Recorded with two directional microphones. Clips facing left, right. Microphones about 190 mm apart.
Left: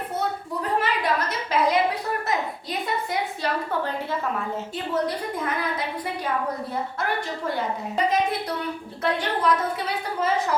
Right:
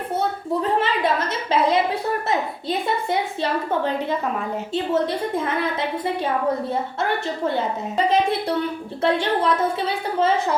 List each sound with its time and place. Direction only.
0.6 s a woman's voice: 25° right (ahead or behind)
7.0 s a woman's voice: 25° right (ahead or behind)